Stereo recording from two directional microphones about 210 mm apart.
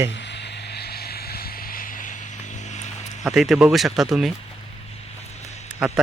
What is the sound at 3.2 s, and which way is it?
Speech, centre (ahead or behind).